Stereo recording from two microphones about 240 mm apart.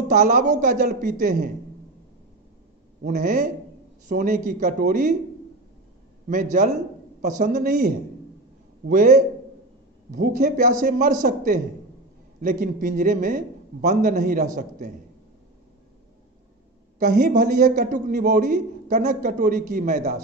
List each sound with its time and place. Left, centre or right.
0.1 s a man's voice: right
3.0 s a man's voice: right
6.2 s a man's voice: right
17.0 s a man's voice: right